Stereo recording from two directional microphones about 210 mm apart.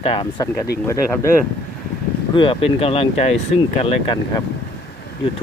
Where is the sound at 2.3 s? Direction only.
25° left (ahead or behind).